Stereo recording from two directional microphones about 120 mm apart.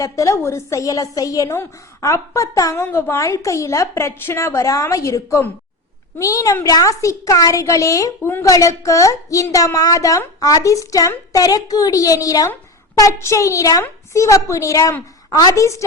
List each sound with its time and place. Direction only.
0.0 s a child's voice: 25° left (ahead or behind)